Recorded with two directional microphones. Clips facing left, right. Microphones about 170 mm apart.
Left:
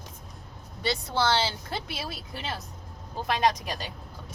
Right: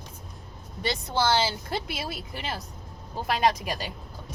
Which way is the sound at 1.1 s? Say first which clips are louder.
Right 2 dB; 10° right (ahead or behind).